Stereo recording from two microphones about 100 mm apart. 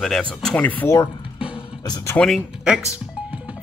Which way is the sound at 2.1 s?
5° left (ahead or behind).